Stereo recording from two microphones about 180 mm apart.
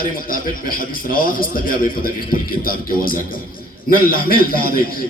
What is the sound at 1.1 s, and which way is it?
Speech, 55° left (ahead or behind).